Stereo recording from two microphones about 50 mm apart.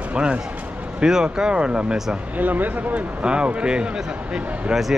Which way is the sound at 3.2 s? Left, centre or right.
Right.